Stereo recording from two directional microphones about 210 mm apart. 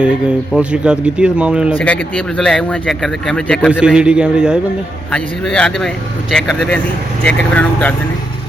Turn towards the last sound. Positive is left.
turn(degrees=5)  # may be behind; listen again after turning